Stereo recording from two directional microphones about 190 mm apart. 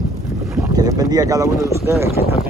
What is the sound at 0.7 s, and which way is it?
Speech, 20° right (ahead or behind).